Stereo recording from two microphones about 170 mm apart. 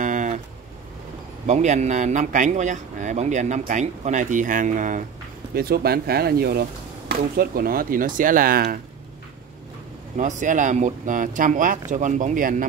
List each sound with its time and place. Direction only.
0.0 s a sound: 45° right (ahead or behind)
1.5 s a man's voice: 40° right (ahead or behind)
5.5 s speech: 60° right (ahead or behind)
10.1 s a man's voice: 45° right (ahead or behind)